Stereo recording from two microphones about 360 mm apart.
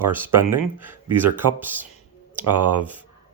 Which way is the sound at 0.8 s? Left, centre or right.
Centre.